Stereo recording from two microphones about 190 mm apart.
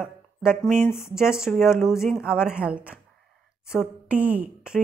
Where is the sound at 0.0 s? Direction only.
5° right (ahead or behind).